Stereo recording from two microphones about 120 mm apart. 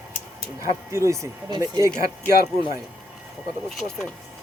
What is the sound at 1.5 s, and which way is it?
Speech, 35° right (ahead or behind).